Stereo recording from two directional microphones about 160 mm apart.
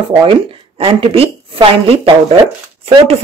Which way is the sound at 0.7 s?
35° right (ahead or behind).